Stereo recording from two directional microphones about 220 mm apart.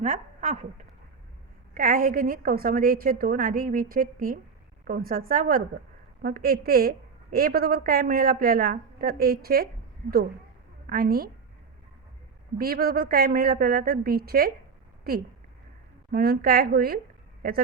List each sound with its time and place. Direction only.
0.0 s a woman's voice: 35° right (ahead or behind)
1.7 s a woman's voice: 40° right (ahead or behind)
10.8 s a woman's voice: 40° right (ahead or behind)
12.5 s a woman's voice: 45° right (ahead or behind)
16.1 s a woman's voice: 45° right (ahead or behind)